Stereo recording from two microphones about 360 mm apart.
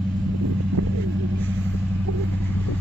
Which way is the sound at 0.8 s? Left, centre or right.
Right.